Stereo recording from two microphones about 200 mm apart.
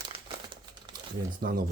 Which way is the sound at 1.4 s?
50° right (ahead or behind).